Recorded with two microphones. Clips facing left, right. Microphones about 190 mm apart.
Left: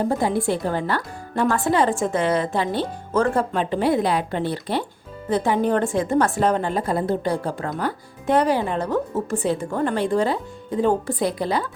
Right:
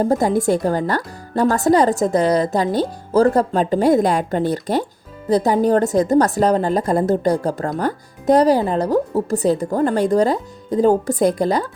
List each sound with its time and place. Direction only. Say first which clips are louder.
0.0 s a woman's voice: right 5 dB; 40° right (ahead or behind)